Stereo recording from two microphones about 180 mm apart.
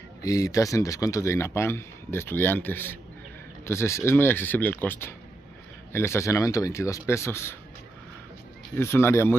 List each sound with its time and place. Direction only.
0.2 s speech: 20° left (ahead or behind)
8.7 s speech: 15° left (ahead or behind)